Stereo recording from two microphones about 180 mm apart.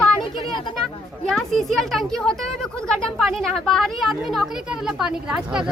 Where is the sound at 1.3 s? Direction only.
Centre (ahead or behind).